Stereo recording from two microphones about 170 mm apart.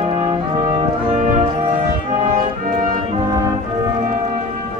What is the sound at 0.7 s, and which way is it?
Music, 40° right (ahead or behind).